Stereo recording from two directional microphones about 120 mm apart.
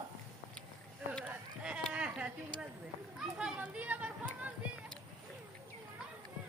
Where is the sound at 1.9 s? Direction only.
10° right (ahead or behind).